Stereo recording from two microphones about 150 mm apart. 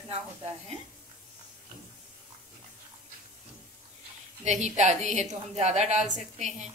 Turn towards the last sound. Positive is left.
turn(degrees=-50)  # may be behind; listen again after turning